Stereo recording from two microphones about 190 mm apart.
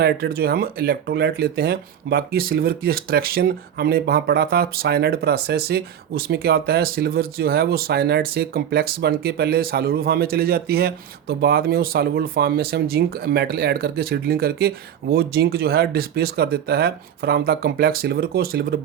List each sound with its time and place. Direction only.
0.0 s speech: 55° right (ahead or behind)